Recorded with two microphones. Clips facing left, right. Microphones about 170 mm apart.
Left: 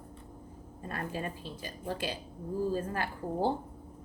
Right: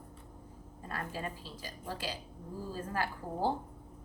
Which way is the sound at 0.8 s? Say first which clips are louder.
Left 3 dB; 25° left (ahead or behind).